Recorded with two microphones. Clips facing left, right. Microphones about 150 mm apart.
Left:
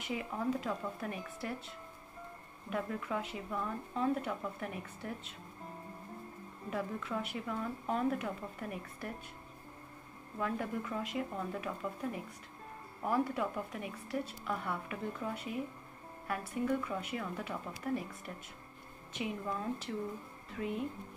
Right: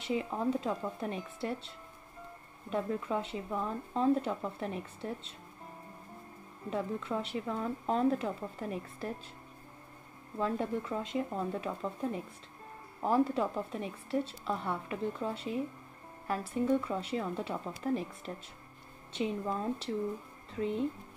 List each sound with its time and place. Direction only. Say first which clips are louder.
0.0 s speech: right 4 dB; 25° right (ahead or behind)
2.7 s speech: right 4 dB; 25° right (ahead or behind)
6.7 s speech: right 3 dB; 25° right (ahead or behind)
10.4 s speech: right 4 dB; 25° right (ahead or behind)